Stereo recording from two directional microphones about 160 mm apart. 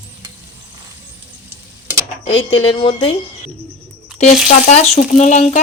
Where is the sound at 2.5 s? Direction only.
30° left (ahead or behind).